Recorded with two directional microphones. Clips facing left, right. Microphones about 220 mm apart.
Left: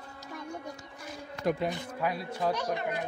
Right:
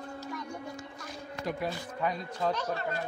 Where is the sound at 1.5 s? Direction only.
20° left (ahead or behind).